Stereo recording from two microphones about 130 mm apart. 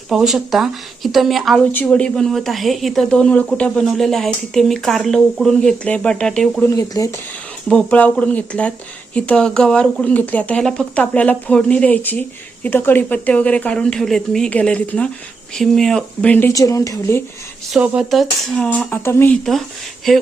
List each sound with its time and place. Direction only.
0.1 s a woman's voice: 5° right (ahead or behind)
1.7 s a woman's voice: 10° left (ahead or behind)
6.7 s speech: 25° left (ahead or behind)
7.7 s a woman's voice: 10° left (ahead or behind)
16.5 s speech: 25° left (ahead or behind)
17.7 s a woman's voice: 5° right (ahead or behind); by 19.4 s 15° left (ahead or behind)